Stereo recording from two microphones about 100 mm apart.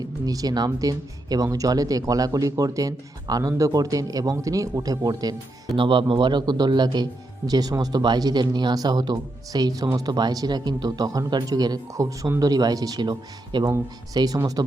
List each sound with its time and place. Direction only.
0.0 s speech: 35° right (ahead or behind)
5.7 s speech: 60° right (ahead or behind)
13.7 s speech: 30° right (ahead or behind)